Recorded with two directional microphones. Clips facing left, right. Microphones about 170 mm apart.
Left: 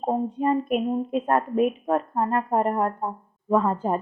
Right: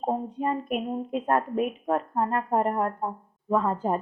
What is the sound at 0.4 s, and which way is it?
A woman's voice, 30° left (ahead or behind).